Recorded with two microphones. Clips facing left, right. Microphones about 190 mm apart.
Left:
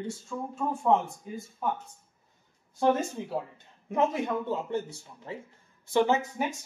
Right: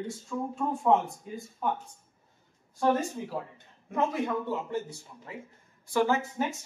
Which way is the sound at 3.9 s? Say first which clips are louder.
Left 2 dB; 20° left (ahead or behind).